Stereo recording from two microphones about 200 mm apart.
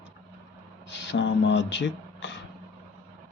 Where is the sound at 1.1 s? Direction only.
60° left (ahead or behind).